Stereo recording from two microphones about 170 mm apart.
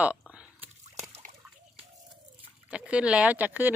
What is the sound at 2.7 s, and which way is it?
Speech, 5° right (ahead or behind).